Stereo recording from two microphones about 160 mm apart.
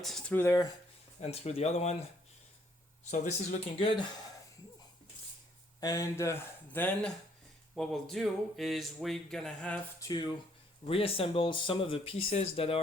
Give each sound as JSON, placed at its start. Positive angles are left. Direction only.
{"t": 0.0, "sound": "speech", "side_deg": 5}
{"t": 1.2, "sound": "speech", "side_deg": 40}
{"t": 3.0, "sound": "speech", "side_deg": 50}
{"t": 3.8, "sound": "speech", "side_deg": 35}
{"t": 5.8, "sound": "speech", "side_deg": 20}
{"t": 10.0, "sound": "speech", "side_deg": 25}
{"t": 10.8, "sound": "speech", "side_deg": 35}